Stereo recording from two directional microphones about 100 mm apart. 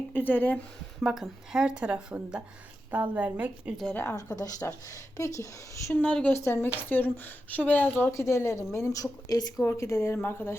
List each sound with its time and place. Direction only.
0.1 s a woman's voice: 20° left (ahead or behind)
1.0 s a woman's voice: 5° right (ahead or behind)
4.6 s a woman's voice: 25° left (ahead or behind)
5.9 s a woman's voice: 10° left (ahead or behind)
6.3 s a woman's voice: 25° left (ahead or behind)